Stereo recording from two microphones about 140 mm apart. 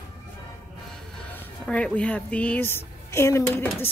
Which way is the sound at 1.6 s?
10° left (ahead or behind).